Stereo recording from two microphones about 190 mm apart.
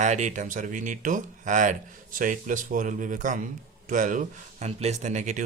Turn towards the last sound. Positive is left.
turn(degrees=-40)  # may be behind; listen again after turning